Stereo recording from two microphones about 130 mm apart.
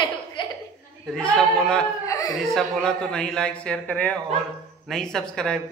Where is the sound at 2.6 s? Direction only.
5° left (ahead or behind).